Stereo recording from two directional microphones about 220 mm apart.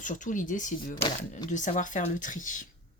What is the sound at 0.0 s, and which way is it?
Speech, 35° left (ahead or behind).